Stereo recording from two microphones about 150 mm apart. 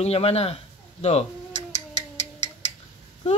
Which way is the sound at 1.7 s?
50° left (ahead or behind).